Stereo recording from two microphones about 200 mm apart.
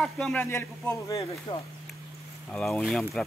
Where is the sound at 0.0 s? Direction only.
5° left (ahead or behind).